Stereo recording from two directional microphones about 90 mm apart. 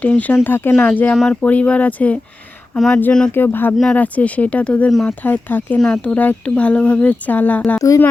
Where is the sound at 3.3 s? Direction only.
20° left (ahead or behind).